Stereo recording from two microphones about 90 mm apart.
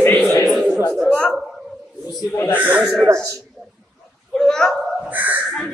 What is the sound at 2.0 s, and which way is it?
Speech, 35° left (ahead or behind).